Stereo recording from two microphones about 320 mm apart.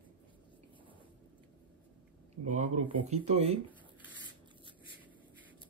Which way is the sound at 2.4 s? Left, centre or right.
Right.